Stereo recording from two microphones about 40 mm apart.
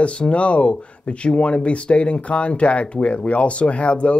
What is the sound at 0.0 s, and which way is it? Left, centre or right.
Speech, left.